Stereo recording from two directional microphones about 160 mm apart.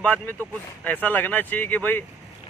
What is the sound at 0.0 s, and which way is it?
A man's voice, 10° left (ahead or behind).